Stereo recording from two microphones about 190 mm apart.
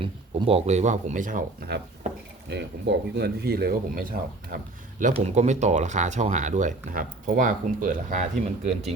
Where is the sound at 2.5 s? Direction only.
65° right (ahead or behind).